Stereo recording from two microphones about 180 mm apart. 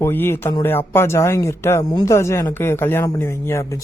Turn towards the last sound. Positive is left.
turn(degrees=15)  # may be behind; listen again after turning